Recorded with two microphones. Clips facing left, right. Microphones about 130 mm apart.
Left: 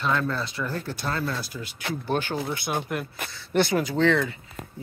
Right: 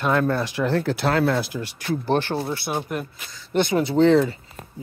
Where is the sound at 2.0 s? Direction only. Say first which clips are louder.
Right 4 dB; 40° right (ahead or behind).